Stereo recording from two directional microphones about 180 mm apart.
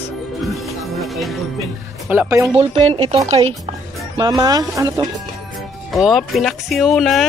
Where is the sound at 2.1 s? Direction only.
10° right (ahead or behind).